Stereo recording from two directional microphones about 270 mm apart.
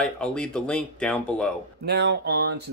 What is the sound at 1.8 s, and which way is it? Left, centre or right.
Speech, right.